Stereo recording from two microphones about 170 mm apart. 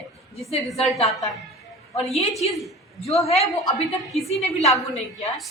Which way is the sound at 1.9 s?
35° left (ahead or behind).